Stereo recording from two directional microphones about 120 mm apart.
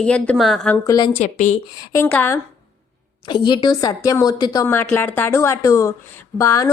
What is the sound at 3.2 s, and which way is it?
A woman's voice, 40° left (ahead or behind).